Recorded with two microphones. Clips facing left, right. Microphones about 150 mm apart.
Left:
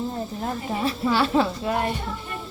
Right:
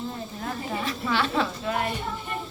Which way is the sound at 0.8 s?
30° left (ahead or behind).